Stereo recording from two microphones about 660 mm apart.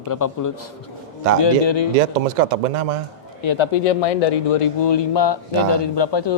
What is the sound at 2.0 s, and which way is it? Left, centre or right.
Speech, right.